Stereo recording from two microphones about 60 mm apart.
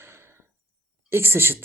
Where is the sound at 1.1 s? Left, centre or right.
Right.